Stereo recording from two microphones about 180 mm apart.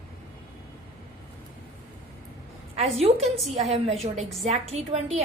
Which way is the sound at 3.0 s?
35° right (ahead or behind).